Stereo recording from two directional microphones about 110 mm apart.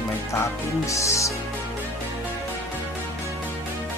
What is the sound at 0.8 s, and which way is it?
Music, 30° left (ahead or behind).